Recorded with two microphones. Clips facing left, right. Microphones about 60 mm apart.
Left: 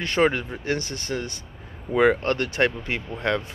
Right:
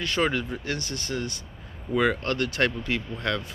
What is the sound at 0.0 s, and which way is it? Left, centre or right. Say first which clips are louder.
Speech: left 4 dB; left.